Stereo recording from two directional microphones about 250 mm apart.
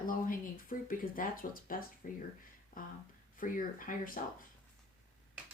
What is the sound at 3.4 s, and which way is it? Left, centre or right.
Speech, left.